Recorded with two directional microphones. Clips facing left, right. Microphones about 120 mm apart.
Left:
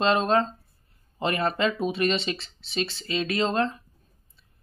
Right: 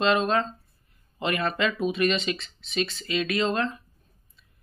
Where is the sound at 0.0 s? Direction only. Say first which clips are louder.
Left 1 dB; 35° left (ahead or behind).